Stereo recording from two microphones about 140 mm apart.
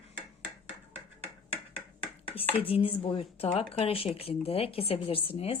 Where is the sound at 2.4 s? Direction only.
40° left (ahead or behind).